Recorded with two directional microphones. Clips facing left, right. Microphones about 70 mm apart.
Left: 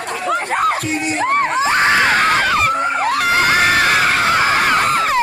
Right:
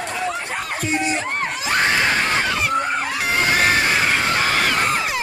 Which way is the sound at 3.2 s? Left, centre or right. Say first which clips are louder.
Left 6 dB; left.